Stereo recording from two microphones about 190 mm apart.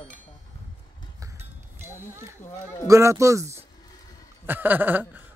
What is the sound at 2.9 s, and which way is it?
Speech, 15° right (ahead or behind).